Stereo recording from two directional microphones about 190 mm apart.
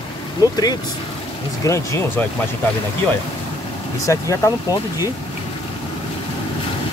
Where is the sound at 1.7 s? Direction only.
15° left (ahead or behind).